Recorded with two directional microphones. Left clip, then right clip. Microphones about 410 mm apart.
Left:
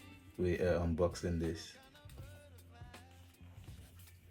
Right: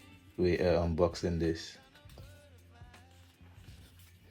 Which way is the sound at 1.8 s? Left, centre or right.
Centre.